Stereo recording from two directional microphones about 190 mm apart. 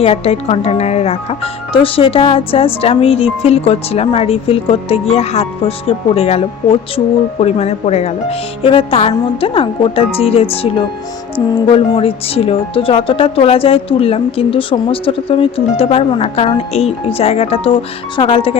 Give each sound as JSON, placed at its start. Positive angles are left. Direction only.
{"t": 0.0, "sound": "speech", "side_deg": 30}